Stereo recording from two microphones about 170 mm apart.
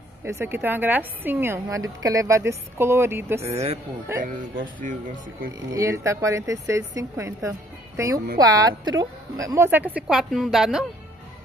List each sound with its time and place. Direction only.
0.2 s a woman's voice: 15° right (ahead or behind)
3.4 s speech: 35° right (ahead or behind)
4.2 s speech: 50° right (ahead or behind)
5.7 s a woman's voice: 20° right (ahead or behind); by 10.9 s centre (ahead or behind)